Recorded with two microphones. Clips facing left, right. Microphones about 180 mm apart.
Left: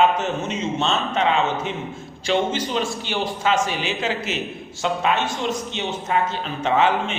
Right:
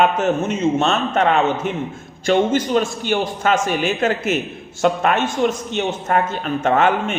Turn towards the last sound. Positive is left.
turn(degrees=-50)  # may be behind; listen again after turning